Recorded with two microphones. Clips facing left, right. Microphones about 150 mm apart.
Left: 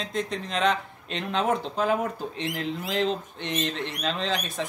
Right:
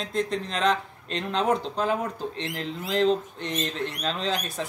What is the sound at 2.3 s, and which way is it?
Speech, 30° right (ahead or behind).